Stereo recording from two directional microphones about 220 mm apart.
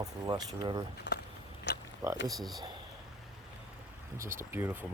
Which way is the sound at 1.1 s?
55° left (ahead or behind).